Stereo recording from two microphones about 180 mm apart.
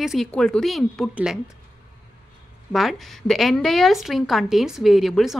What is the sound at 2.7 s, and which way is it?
A woman's voice, centre (ahead or behind).